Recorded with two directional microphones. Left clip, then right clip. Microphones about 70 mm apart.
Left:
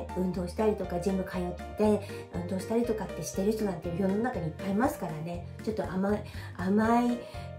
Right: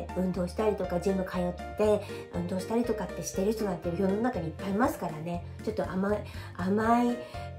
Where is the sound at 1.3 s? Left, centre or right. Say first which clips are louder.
Right 3 dB; right.